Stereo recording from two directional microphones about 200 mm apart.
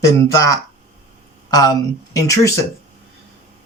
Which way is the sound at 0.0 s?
15° left (ahead or behind).